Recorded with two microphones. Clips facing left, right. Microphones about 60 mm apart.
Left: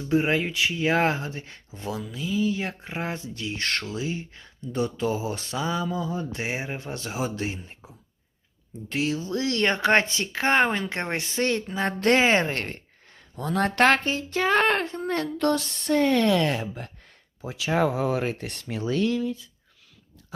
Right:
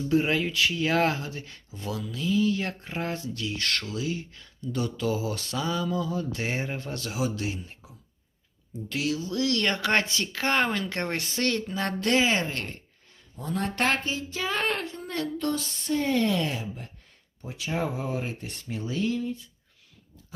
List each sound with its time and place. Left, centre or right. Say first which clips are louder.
0.0 s speech: left 1 dB; left
2.2 s speech: right 1 dB; centre
6.5 s speech: even; centre
11.9 s a woman's voice: left 4 dB; left
13.3 s speech: left 6 dB; left
15.4 s speech: left 5 dB; left
17.4 s speech: left 6 dB; left